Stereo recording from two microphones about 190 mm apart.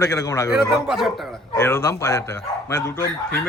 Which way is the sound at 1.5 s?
15° left (ahead or behind).